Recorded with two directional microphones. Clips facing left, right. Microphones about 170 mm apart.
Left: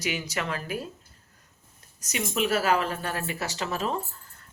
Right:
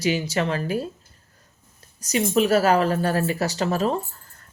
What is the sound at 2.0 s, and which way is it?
A woman's voice, 35° right (ahead or behind).